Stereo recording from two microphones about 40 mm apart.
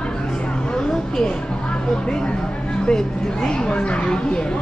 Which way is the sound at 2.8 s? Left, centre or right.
Centre.